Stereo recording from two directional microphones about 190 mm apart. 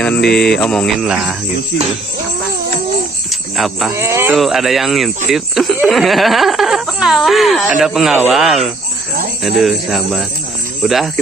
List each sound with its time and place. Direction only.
0.0 s mantra: 5° left (ahead or behind)
0.6 s speech: 5° left (ahead or behind)
3.5 s speech: centre (ahead or behind)
3.9 s speech: 15° right (ahead or behind)
4.4 s speech: centre (ahead or behind)
9.6 s speech: centre (ahead or behind)